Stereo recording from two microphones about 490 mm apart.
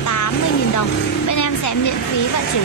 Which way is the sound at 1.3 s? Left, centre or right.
Left.